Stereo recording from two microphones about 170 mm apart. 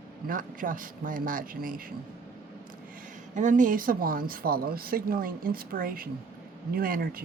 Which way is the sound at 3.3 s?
50° right (ahead or behind).